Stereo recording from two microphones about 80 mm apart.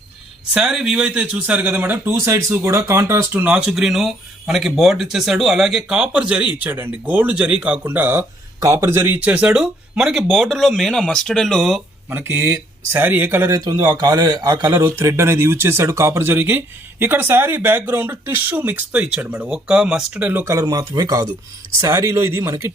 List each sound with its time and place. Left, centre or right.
0.5 s speech: centre; by 2.1 s right
2.1 s speech: right
3.4 s speech: centre
6.6 s speech: right
8.2 s speech: right; by 11.8 s centre
12.0 s speech: right
13.5 s a man's voice: right
14.8 s speech: right; by 20.1 s centre
20.1 s speech: right
20.4 s speech: right